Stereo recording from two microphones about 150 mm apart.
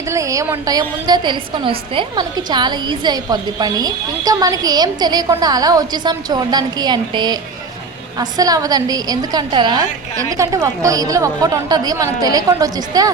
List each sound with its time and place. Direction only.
0.1 s a woman's voice: 20° right (ahead or behind)